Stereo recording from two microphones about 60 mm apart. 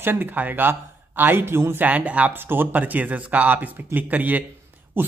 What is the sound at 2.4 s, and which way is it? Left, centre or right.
Speech, right.